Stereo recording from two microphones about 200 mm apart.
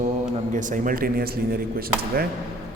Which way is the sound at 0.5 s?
40° right (ahead or behind).